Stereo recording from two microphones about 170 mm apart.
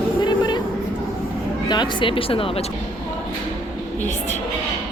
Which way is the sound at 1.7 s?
25° left (ahead or behind).